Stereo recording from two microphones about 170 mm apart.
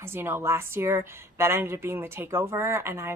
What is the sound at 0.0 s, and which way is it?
A woman's voice, 15° right (ahead or behind).